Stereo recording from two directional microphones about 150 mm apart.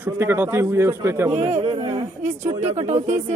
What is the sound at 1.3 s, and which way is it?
Speech, 45° right (ahead or behind).